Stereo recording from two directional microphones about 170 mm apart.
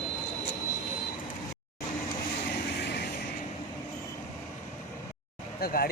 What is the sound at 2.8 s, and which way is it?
Vehicle, 80° left.